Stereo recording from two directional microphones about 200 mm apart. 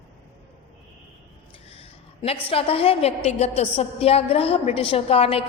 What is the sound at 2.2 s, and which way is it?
A woman's voice, 30° left (ahead or behind).